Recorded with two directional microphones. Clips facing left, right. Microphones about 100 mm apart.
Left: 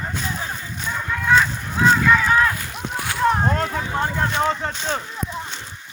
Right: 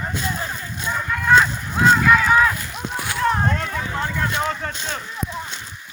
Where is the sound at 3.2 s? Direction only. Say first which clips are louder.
Left 2 dB; 20° left (ahead or behind).